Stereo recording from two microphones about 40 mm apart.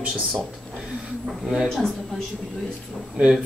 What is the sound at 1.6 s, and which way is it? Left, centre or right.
Speech, centre.